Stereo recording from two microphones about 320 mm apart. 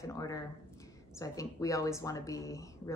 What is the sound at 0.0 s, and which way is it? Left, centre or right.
Speech, centre.